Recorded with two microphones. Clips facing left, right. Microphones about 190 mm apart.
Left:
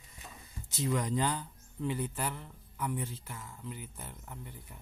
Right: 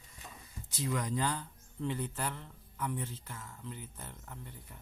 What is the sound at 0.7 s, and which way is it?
Speech, 25° left (ahead or behind).